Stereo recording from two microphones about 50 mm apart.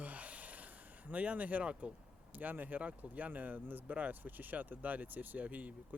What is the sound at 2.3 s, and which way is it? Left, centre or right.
Speech, right.